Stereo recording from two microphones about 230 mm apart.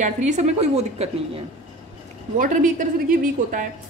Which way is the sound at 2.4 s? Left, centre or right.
Right.